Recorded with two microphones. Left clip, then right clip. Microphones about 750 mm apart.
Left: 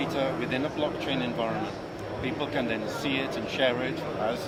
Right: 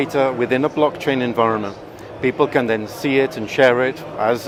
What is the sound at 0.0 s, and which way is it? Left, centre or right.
Speech, right.